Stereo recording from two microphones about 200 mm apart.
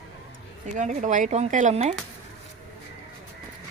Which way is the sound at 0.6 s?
40° right (ahead or behind).